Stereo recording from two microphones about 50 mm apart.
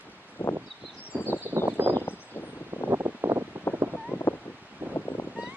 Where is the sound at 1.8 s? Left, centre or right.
Right.